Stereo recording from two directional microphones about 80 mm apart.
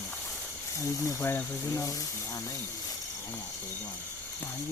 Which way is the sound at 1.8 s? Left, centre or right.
Left.